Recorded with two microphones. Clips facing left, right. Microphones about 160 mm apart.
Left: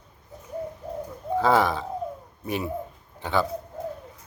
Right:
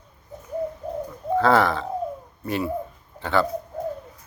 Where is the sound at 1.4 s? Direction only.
10° left (ahead or behind).